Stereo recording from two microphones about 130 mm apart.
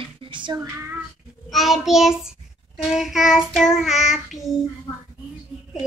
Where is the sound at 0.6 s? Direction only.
15° right (ahead or behind).